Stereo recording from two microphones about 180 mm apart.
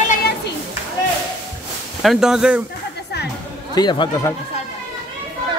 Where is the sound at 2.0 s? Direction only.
5° right (ahead or behind).